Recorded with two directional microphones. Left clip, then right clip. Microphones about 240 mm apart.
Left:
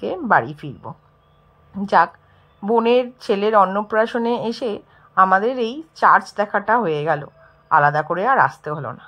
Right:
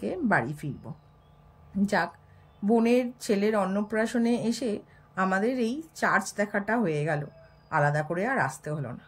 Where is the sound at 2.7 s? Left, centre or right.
Centre.